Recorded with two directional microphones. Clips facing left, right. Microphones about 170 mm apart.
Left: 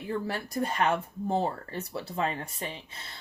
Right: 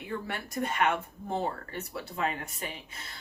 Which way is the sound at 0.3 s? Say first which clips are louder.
Left 2 dB; 35° left (ahead or behind).